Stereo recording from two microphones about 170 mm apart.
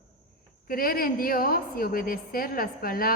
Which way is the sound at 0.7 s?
60° left (ahead or behind).